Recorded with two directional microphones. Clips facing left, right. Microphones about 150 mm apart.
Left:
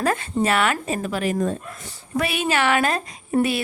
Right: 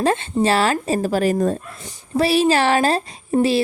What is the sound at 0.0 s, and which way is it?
A woman's voice, 25° right (ahead or behind).